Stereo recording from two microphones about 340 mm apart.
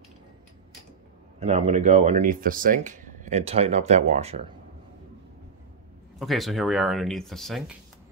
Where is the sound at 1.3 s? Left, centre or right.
Centre.